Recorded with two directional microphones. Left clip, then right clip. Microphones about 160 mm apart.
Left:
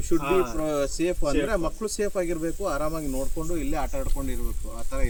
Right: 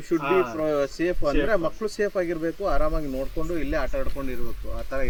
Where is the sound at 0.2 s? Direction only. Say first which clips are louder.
Right 2 dB; 5° left (ahead or behind).